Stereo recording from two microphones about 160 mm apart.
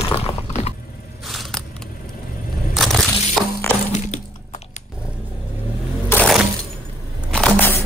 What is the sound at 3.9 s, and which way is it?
Crack, 45° left (ahead or behind).